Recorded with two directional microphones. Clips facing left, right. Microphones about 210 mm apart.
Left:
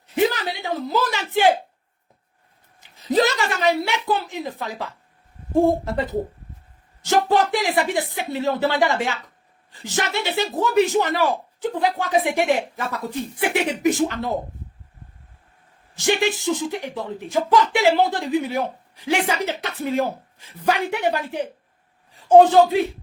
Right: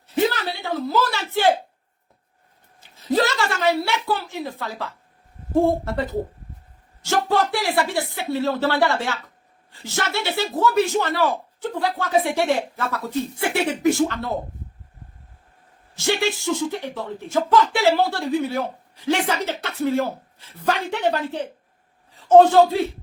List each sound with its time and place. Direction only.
0.2 s a sound: 15° left (ahead or behind)
2.9 s a woman's voice: 15° left (ahead or behind)
16.0 s speech: 15° left (ahead or behind)